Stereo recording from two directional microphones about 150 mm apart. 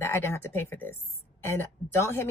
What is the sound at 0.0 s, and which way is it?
A woman's voice, 15° left (ahead or behind).